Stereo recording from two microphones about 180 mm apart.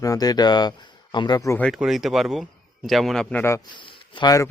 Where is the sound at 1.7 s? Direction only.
Centre (ahead or behind); by 4.5 s 20° left (ahead or behind).